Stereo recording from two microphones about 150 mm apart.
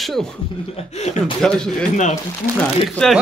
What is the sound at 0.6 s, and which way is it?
Speech, 40° left (ahead or behind).